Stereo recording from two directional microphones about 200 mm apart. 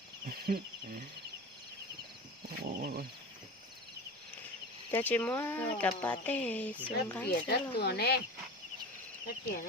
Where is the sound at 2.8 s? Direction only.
50° right (ahead or behind).